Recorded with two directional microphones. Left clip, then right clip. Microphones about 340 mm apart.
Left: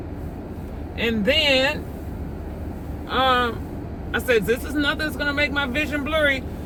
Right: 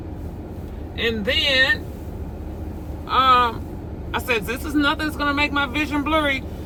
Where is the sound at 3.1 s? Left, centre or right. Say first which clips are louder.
Right 4 dB; centre.